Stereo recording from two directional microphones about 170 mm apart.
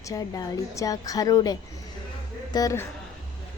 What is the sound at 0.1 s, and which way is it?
A woman's voice, 20° left (ahead or behind).